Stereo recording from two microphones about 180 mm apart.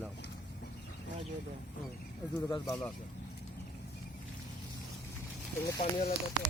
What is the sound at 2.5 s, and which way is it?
Speech, 25° left (ahead or behind).